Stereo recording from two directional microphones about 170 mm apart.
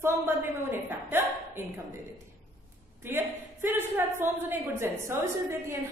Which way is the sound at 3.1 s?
10° right (ahead or behind).